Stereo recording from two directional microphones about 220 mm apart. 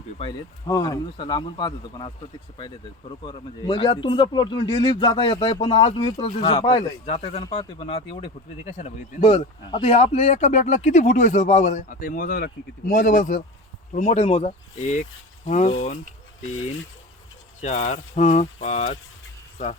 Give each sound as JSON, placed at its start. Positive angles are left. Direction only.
{"t": 0.2, "sound": "speech", "side_deg": 20}
{"t": 3.2, "sound": "speech", "side_deg": 20}
{"t": 17.6, "sound": "speech", "side_deg": 30}